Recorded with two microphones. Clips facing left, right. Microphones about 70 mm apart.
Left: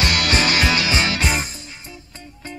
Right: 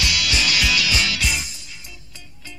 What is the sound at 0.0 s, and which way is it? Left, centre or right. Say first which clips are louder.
Music: left 4 dB; left.